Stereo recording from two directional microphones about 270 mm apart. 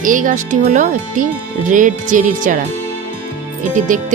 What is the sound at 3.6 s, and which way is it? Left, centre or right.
Speech, right.